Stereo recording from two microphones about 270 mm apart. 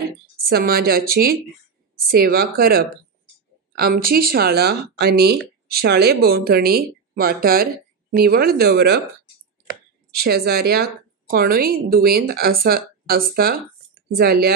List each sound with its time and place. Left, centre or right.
0.5 s speech: right
10.1 s speech: right